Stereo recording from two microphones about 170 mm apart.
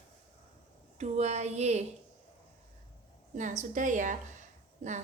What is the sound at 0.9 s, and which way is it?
Speech, 40° right (ahead or behind).